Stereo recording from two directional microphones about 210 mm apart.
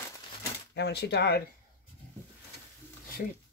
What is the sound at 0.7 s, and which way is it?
Speech, 55° left (ahead or behind).